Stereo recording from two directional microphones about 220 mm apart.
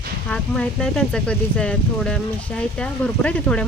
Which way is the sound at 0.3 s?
5° left (ahead or behind).